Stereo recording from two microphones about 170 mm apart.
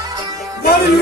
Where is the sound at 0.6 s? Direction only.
70° left (ahead or behind).